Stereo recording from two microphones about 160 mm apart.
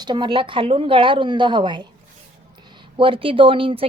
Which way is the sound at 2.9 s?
35° right (ahead or behind).